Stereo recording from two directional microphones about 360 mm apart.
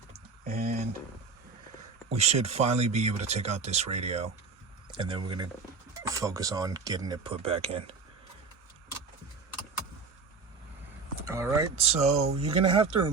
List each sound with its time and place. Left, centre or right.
0.4 s a sound: right
2.1 s speech: centre
11.3 s speech: centre